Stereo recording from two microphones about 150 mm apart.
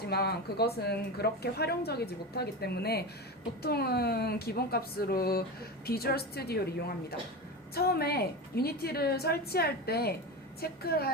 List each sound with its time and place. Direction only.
0.0 s a woman's voice: 90° left